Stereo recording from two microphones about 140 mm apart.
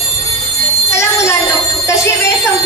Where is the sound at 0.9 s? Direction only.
20° left (ahead or behind).